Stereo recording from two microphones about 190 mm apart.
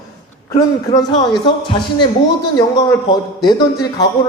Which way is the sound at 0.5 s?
20° left (ahead or behind).